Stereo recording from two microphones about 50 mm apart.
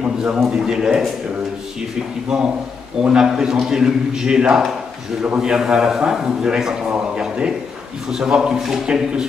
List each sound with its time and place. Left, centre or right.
0.0 s a sound: right
0.5 s a man's voice: centre
2.3 s a man's voice: centre